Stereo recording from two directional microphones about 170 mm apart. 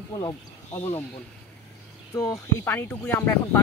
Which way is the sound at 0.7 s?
15° left (ahead or behind).